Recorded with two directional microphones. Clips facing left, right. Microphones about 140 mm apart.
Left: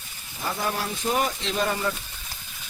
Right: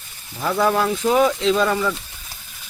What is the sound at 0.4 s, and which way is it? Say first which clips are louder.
Speech: right 10 dB; 90° right.